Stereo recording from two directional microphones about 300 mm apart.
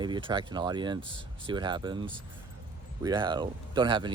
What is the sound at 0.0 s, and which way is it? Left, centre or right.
Speech, centre.